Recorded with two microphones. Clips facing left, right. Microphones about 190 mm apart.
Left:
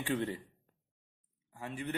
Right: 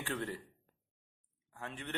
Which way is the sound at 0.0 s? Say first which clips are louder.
Left 5 dB; 15° left (ahead or behind).